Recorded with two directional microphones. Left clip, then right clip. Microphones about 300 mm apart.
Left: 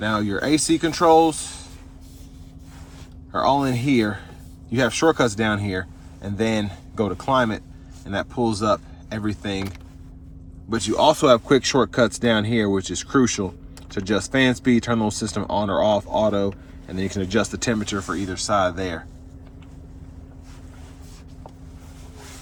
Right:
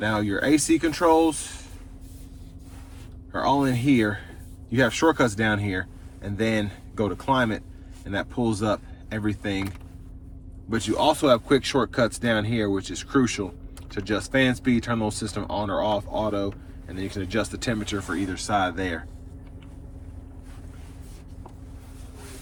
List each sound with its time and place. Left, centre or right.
0.0 s speech: centre
3.3 s speech: centre
10.7 s speech: centre